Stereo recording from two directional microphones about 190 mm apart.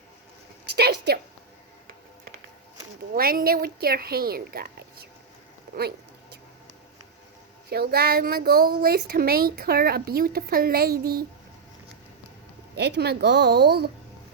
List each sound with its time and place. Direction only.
0.8 s a sound: 60° right (ahead or behind)
3.2 s a woman's voice: 50° right (ahead or behind)
7.7 s a woman's voice: 55° right (ahead or behind)
12.7 s a woman's voice: 60° right (ahead or behind)